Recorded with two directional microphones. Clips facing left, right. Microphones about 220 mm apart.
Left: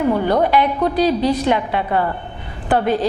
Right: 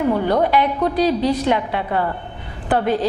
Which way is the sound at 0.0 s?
25° left (ahead or behind).